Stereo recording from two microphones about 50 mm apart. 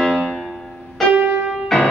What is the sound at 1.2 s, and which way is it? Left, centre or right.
Music, right.